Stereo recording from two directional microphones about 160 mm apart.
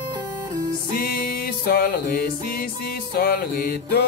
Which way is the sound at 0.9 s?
70° left (ahead or behind).